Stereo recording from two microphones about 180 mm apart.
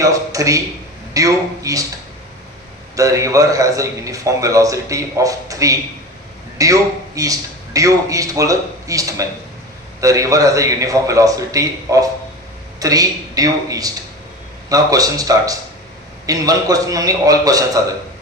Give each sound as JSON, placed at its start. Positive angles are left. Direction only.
{"t": 0.0, "sound": "a man's voice", "side_deg": -20}
{"t": 2.9, "sound": "a man's voice", "side_deg": -20}